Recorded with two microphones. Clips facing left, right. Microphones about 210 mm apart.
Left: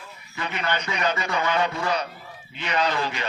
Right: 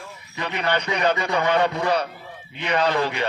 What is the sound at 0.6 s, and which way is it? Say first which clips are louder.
Speech: right 4 dB; 60° right (ahead or behind).